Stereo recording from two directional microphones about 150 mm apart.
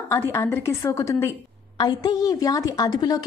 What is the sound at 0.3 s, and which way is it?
A woman's voice, 15° left (ahead or behind).